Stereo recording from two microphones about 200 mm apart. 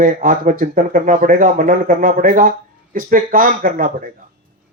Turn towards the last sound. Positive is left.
turn(degrees=-45)  # may be behind; listen again after turning